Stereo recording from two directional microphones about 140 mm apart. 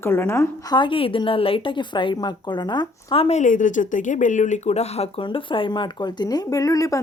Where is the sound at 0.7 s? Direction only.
35° left (ahead or behind).